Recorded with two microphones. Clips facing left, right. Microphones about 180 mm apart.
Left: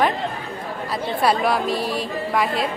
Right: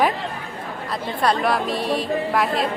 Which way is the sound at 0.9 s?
5° left (ahead or behind).